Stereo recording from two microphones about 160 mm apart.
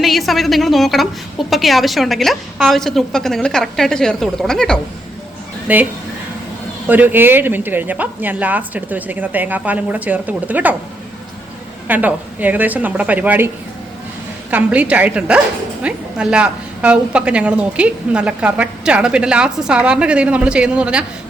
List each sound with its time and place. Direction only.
0.0 s a woman's voice: centre (ahead or behind)
5.6 s a woman's voice: 10° right (ahead or behind)
11.9 s a woman's voice: 10° right (ahead or behind)
14.5 s a woman's voice: 10° right (ahead or behind)